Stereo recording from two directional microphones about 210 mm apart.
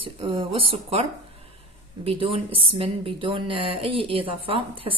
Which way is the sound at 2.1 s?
25° right (ahead or behind).